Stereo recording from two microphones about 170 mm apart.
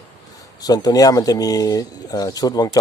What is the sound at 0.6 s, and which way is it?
Speech, 20° left (ahead or behind).